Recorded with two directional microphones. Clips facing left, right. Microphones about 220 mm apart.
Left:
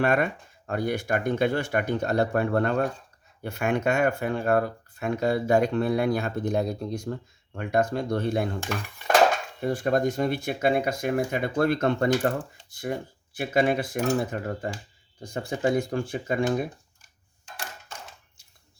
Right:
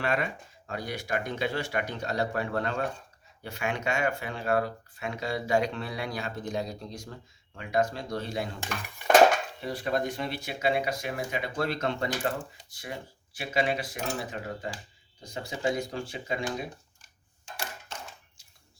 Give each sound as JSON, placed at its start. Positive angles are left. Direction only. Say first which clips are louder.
{"t": 0.0, "sound": "speech", "louder": "left 6 dB", "side_deg": 55}
{"t": 9.6, "sound": "speech", "louder": "left 6 dB", "side_deg": 50}